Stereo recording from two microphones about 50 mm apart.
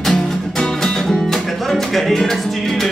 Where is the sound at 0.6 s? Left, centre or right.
Centre.